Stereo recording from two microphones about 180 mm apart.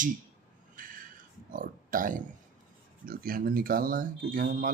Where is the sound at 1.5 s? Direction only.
50° right (ahead or behind).